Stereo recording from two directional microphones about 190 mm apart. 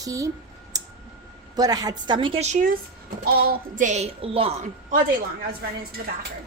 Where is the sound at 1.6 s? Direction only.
20° right (ahead or behind).